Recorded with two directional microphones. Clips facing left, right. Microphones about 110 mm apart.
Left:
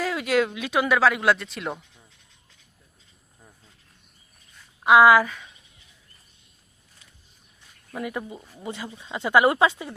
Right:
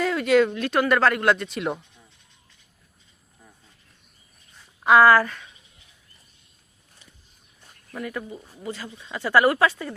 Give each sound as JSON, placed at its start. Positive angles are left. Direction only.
{"t": 0.0, "sound": "speech", "side_deg": 5}
{"t": 4.8, "sound": "a woman's voice", "side_deg": 10}
{"t": 8.0, "sound": "speech", "side_deg": 20}